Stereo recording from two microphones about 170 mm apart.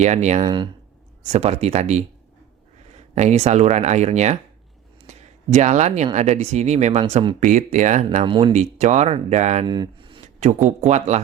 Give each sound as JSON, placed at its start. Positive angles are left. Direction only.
{"t": 0.0, "sound": "speech", "side_deg": -40}
{"t": 0.4, "sound": "speech", "side_deg": -25}
{"t": 1.2, "sound": "speech", "side_deg": -40}
{"t": 5.0, "sound": "a sound", "side_deg": -40}
{"t": 6.1, "sound": "speech", "side_deg": -40}
{"t": 8.2, "sound": "speech", "side_deg": -30}
{"t": 8.5, "sound": "speech", "side_deg": -45}
{"t": 9.6, "sound": "speech", "side_deg": -25}
{"t": 10.4, "sound": "speech", "side_deg": -45}